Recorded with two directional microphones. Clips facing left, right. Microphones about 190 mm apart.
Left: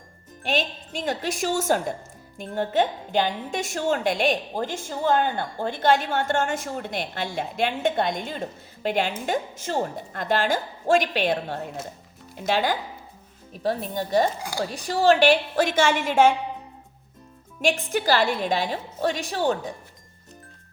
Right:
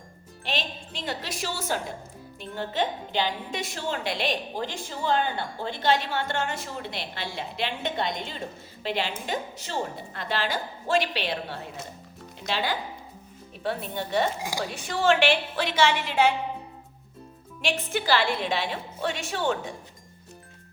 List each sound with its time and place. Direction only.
0.4 s a woman's voice: 45° left (ahead or behind)
17.6 s a woman's voice: 45° left (ahead or behind)